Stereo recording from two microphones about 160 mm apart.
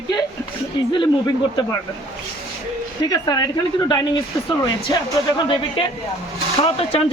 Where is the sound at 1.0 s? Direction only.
25° left (ahead or behind).